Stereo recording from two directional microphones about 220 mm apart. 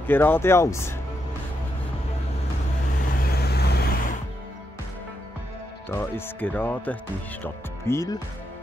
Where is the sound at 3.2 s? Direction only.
45° left (ahead or behind).